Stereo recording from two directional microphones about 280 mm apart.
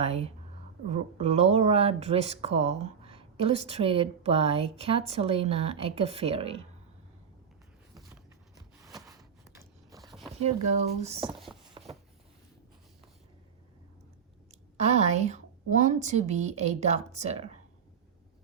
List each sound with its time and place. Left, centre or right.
0.0 s speech: right
9.4 s biting: centre
10.0 s zipper: centre
10.4 s speech: right
11.8 s a sound: centre
14.8 s speech: right